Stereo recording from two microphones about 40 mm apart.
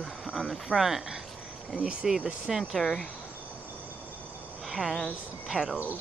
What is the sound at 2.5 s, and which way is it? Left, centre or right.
Speech, centre.